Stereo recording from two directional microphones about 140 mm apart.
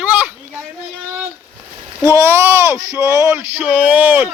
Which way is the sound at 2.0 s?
20° right (ahead or behind).